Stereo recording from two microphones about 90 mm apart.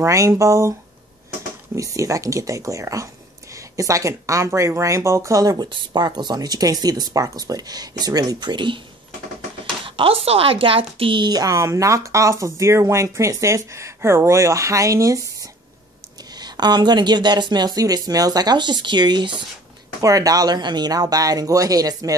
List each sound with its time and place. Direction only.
0.0 s a woman's voice: 35° right (ahead or behind)
1.8 s a woman's voice: 35° right (ahead or behind); by 8.8 s 60° right (ahead or behind)
9.8 s a woman's voice: 85° right; by 15.5 s 35° right (ahead or behind)
16.3 s speech: 50° right (ahead or behind)
20.0 s speech: 40° right (ahead or behind)